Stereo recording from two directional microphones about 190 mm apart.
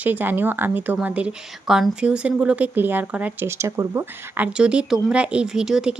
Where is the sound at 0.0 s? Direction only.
10° right (ahead or behind).